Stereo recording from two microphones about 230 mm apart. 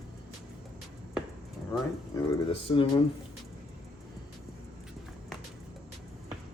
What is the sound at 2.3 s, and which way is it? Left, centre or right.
Speech, left.